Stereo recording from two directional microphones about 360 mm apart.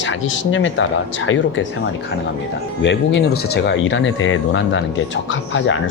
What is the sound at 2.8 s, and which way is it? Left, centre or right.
Speech, left.